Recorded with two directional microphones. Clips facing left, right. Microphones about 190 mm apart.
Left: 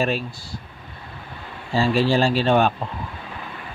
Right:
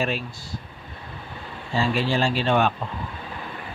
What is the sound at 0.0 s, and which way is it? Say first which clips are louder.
Speech: left 3 dB; 35° left (ahead or behind).